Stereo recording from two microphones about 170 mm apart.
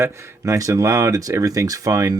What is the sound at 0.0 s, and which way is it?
Speech, 20° right (ahead or behind).